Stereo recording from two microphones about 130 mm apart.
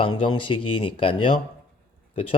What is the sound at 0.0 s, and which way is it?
Speech, 40° left (ahead or behind).